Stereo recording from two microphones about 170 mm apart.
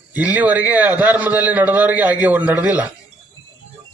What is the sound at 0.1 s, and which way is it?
A man's voice, 10° right (ahead or behind).